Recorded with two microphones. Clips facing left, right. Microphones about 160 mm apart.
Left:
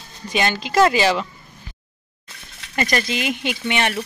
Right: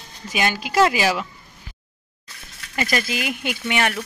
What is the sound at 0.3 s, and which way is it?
Speech, 10° right (ahead or behind).